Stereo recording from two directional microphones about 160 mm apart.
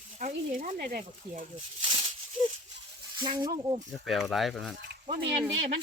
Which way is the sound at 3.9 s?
Centre (ahead or behind).